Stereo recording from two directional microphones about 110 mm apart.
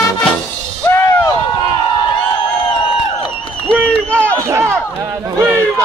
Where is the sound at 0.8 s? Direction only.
25° left (ahead or behind).